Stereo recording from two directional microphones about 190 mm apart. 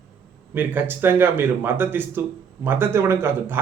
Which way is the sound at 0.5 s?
10° right (ahead or behind).